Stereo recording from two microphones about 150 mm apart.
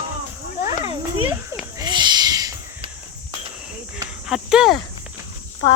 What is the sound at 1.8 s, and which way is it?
Owl, 30° right (ahead or behind).